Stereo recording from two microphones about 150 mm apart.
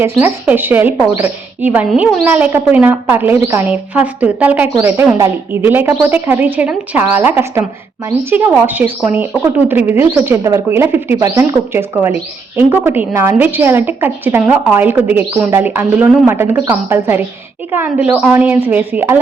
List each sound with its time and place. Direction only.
0.0 s speech: 15° right (ahead or behind)